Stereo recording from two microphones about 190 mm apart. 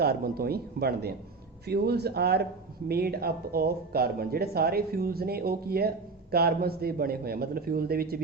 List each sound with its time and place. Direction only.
0.0 s speech: 55° right (ahead or behind)